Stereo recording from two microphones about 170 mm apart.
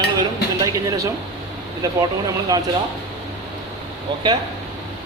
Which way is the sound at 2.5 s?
20° right (ahead or behind).